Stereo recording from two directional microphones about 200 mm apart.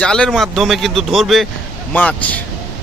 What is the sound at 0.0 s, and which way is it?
Speech, 5° left (ahead or behind).